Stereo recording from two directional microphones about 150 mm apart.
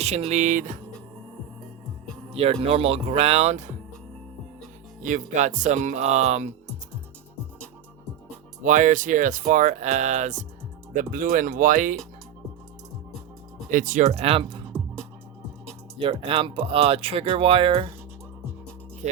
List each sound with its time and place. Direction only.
0.0 s speech: 45° right (ahead or behind)
2.3 s speech: 40° right (ahead or behind)
5.0 s speech: 55° right (ahead or behind)
8.6 s speech: 60° right (ahead or behind)
13.7 s speech: 60° right (ahead or behind); by 14.7 s 35° right (ahead or behind)
16.0 s speech: 35° right (ahead or behind)